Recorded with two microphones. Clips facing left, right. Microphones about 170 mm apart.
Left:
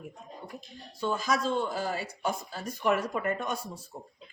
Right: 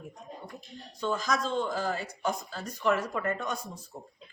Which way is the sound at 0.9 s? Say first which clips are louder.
Left 1 dB; 10° left (ahead or behind).